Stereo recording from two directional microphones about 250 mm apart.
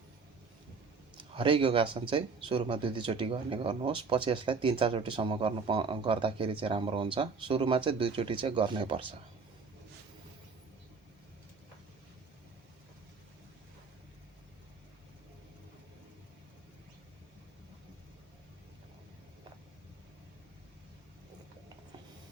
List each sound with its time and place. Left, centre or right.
1.4 s speech: right